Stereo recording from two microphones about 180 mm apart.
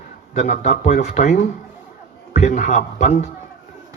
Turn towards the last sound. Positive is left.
turn(degrees=40)  # may be behind; listen again after turning